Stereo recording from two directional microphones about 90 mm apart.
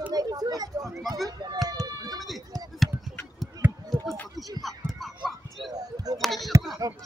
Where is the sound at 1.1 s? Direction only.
45° right (ahead or behind).